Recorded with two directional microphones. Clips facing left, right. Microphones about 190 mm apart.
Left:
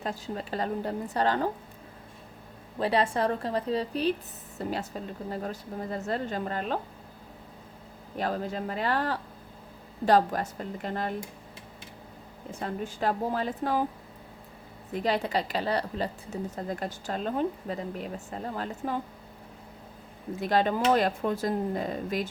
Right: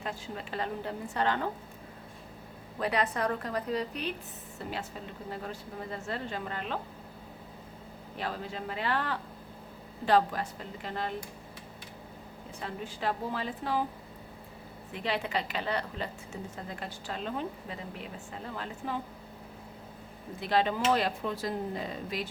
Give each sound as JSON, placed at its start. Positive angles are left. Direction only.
{"t": 0.0, "sound": "a woman's voice", "side_deg": 40}
{"t": 2.7, "sound": "a woman's voice", "side_deg": 30}
{"t": 8.2, "sound": "a woman's voice", "side_deg": 45}
{"t": 12.5, "sound": "a woman's voice", "side_deg": 45}
{"t": 14.9, "sound": "a woman's voice", "side_deg": 40}
{"t": 20.4, "sound": "a woman's voice", "side_deg": 45}